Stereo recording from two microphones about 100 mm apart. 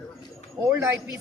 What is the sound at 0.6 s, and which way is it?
Speech, 30° right (ahead or behind).